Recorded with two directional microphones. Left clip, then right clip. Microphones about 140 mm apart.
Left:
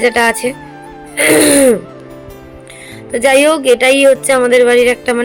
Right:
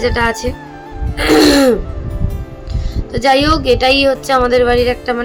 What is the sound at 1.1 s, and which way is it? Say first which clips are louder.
Music: left 1 dB; 20° left (ahead or behind).